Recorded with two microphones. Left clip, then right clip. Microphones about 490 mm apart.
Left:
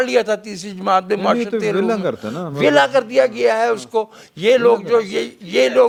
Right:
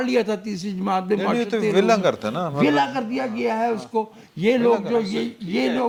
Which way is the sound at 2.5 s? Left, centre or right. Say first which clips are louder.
Left 8 dB; left.